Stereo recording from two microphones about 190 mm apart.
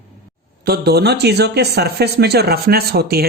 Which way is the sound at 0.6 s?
55° right (ahead or behind).